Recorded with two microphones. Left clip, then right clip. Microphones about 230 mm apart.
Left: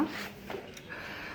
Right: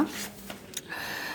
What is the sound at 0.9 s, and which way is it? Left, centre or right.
Vehicle, right.